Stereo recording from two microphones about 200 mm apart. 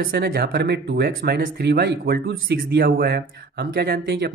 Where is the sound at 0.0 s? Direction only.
50° right (ahead or behind).